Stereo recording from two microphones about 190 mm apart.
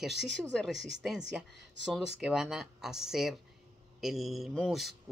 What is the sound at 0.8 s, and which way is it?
Speech, 70° right (ahead or behind).